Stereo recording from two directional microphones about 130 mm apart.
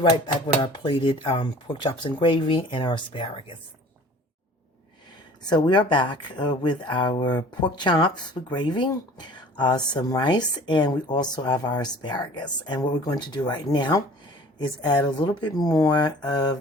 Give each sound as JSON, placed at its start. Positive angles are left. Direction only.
{"t": 0.0, "sound": "speech", "side_deg": 35}
{"t": 5.4, "sound": "speech", "side_deg": 35}